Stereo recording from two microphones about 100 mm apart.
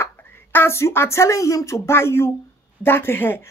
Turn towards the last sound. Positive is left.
turn(degrees=20)  # may be behind; listen again after turning